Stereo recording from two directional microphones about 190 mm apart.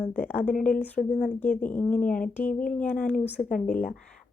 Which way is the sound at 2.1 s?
45° left (ahead or behind).